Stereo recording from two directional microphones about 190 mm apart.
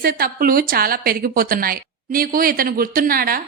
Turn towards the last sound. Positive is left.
turn(degrees=-50)  # may be behind; listen again after turning